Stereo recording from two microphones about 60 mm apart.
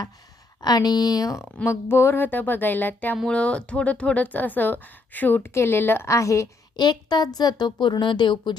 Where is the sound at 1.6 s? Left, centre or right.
Left.